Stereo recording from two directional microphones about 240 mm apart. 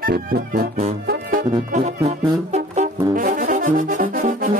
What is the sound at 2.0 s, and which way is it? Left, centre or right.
Brass instrument, right.